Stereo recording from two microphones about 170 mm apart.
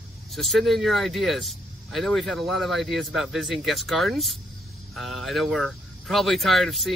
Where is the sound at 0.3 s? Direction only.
Centre (ahead or behind).